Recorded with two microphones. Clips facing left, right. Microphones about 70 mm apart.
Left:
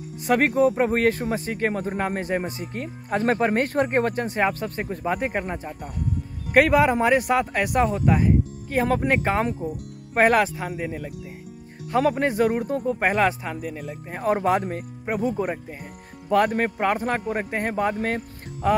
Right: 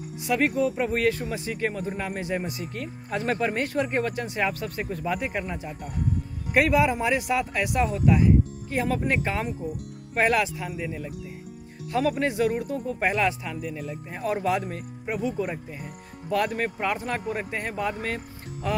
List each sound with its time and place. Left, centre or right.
0.3 s speech: left